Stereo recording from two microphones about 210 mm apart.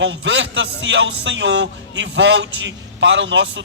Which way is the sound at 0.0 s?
60° right (ahead or behind).